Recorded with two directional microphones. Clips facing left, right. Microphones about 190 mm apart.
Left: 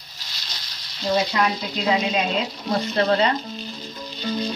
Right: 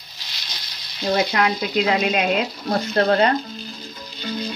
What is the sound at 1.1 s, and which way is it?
Speech, 65° right (ahead or behind).